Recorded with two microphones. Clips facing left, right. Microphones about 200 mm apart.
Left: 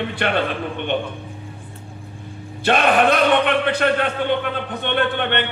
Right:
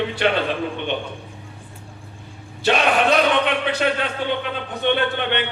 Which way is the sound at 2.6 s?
55° left (ahead or behind).